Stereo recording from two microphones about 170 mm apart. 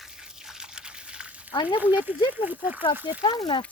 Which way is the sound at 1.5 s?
25° left (ahead or behind).